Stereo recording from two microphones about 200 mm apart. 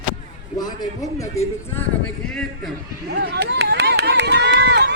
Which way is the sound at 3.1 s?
55° right (ahead or behind).